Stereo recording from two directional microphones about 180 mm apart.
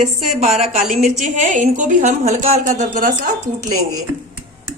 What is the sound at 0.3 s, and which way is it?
A woman's voice, 35° right (ahead or behind).